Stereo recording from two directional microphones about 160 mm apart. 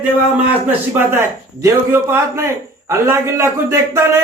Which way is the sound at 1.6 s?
15° right (ahead or behind).